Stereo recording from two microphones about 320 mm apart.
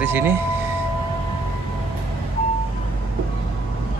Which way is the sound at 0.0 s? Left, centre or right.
Centre.